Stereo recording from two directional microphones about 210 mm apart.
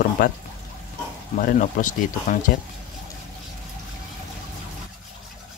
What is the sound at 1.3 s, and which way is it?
Speech, 40° left (ahead or behind).